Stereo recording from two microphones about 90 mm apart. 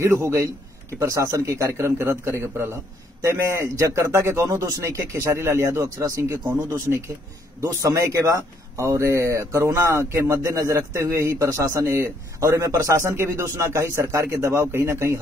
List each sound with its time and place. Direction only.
0.0 s a man's voice: 30° right (ahead or behind)
7.6 s a man's voice: 35° right (ahead or behind)